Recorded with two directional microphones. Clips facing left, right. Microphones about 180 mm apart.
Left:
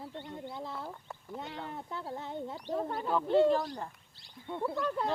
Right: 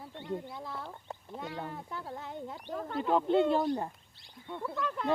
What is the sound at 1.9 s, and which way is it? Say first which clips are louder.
Speech: left 2 dB; 25° left (ahead or behind).